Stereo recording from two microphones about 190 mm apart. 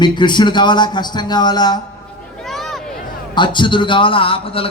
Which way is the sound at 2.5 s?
Centre (ahead or behind).